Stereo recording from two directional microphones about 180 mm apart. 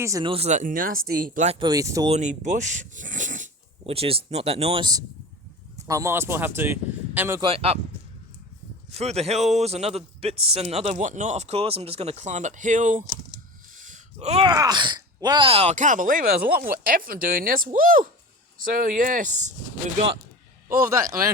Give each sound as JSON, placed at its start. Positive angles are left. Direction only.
{"t": 0.0, "sound": "speech", "side_deg": -15}
{"t": 0.3, "sound": "speech", "side_deg": -35}
{"t": 1.5, "sound": "speech", "side_deg": -20}
{"t": 2.0, "sound": "speech", "side_deg": -40}
{"t": 7.4, "sound": "speech", "side_deg": -35}
{"t": 9.0, "sound": "speech", "side_deg": -35}
{"t": 13.7, "sound": "gasp", "side_deg": -45}
{"t": 14.4, "sound": "speech", "side_deg": -20}
{"t": 20.7, "sound": "speech", "side_deg": -55}